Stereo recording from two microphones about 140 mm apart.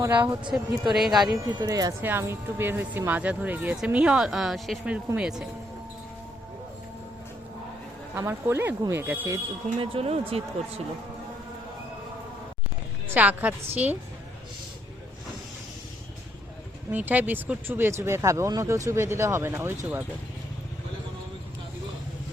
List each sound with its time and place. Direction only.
0.5 s speech: centre (ahead or behind)
1.5 s speech: 25° right (ahead or behind)
2.0 s speech: 15° right (ahead or behind)
8.1 s speech: 15° right (ahead or behind)
9.7 s speech: 45° right (ahead or behind)
13.1 s speech: 10° right (ahead or behind)
16.9 s speech: 10° right (ahead or behind)